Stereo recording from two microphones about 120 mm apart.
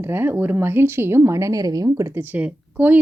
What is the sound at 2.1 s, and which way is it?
Speech, 15° right (ahead or behind).